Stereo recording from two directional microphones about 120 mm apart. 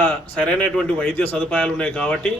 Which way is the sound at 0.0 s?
10° left (ahead or behind).